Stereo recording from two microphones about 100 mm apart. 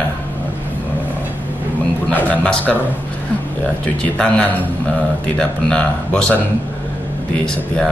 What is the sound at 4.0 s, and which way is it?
A man's voice, 10° left (ahead or behind).